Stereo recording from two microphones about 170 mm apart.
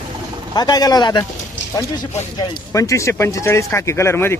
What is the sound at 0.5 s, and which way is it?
Speech, 25° left (ahead or behind).